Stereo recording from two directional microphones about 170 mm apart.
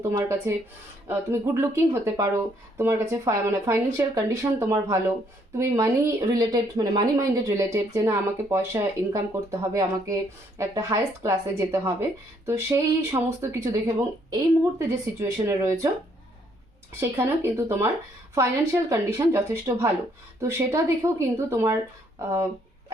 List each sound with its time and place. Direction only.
0.0 s speech: 15° right (ahead or behind)
17.0 s speech: 15° right (ahead or behind)